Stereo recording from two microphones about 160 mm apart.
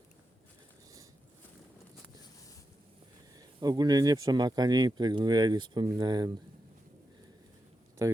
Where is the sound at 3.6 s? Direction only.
25° right (ahead or behind).